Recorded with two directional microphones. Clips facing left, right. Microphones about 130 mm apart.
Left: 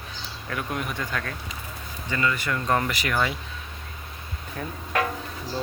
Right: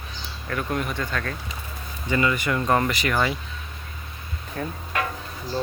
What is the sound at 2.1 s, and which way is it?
Speech, 15° right (ahead or behind).